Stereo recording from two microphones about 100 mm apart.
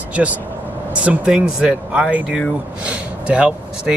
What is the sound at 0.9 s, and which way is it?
Speech, 15° right (ahead or behind).